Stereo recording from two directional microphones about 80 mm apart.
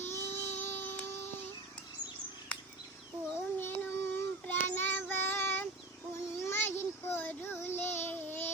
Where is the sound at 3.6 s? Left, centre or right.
Left.